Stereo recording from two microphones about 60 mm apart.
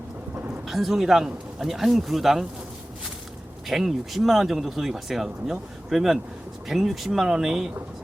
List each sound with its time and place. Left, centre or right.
0.7 s speech: centre
3.7 s speech: centre